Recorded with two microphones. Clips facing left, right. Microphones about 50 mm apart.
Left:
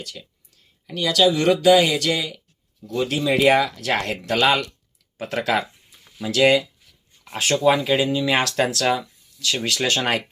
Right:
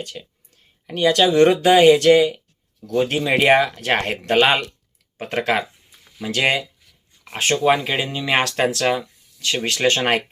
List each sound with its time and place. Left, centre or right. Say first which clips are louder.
0.2 s speech: right 4 dB; centre
0.9 s speech: right 2 dB; right